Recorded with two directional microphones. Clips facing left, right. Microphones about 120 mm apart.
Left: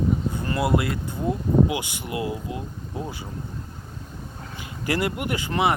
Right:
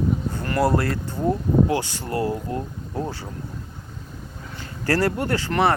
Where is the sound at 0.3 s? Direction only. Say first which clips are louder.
Right 5 dB; 20° left (ahead or behind).